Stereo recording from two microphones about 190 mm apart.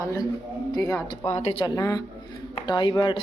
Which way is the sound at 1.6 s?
20° left (ahead or behind).